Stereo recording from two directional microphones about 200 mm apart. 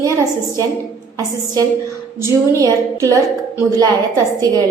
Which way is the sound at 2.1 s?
15° right (ahead or behind).